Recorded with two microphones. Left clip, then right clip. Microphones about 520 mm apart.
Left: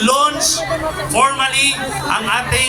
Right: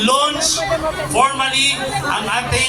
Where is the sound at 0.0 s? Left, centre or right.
Left.